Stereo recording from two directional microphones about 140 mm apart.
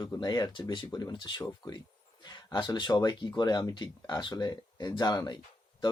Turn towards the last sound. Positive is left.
turn(degrees=30)  # may be behind; listen again after turning